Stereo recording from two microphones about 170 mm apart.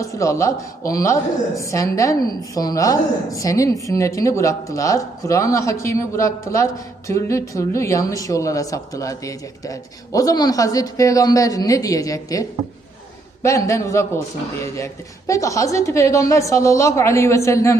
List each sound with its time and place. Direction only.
0.0 s a woman's voice: 20° left (ahead or behind)
15.3 s a woman's voice: 20° left (ahead or behind)